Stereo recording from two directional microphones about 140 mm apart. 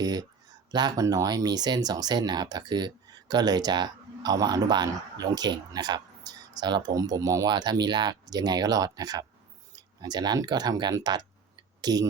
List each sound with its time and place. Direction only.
0.0 s speech: 30° right (ahead or behind)